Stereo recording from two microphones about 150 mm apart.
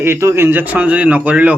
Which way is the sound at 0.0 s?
15° right (ahead or behind).